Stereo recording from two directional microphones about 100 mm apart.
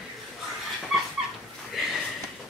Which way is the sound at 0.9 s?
5° right (ahead or behind).